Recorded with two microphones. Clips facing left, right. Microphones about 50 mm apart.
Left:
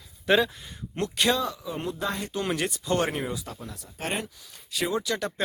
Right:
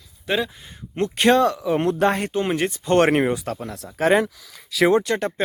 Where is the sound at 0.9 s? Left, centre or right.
Right.